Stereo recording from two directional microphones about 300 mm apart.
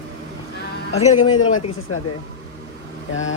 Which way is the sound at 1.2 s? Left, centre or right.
Left.